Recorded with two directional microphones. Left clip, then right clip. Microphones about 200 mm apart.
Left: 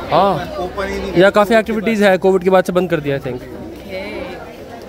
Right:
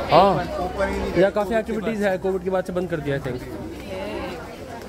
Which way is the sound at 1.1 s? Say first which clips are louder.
Left 9 dB; 35° left (ahead or behind).